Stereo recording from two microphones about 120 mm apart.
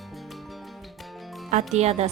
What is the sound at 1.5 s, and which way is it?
Speech, 65° right (ahead or behind).